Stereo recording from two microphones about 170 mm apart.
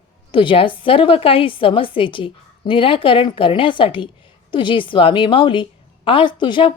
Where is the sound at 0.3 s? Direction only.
30° left (ahead or behind).